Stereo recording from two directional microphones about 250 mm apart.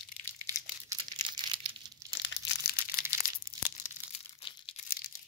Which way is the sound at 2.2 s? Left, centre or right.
Left.